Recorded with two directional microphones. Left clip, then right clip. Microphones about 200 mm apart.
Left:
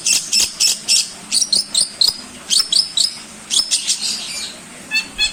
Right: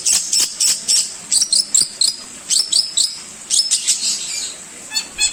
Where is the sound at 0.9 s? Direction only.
25° right (ahead or behind).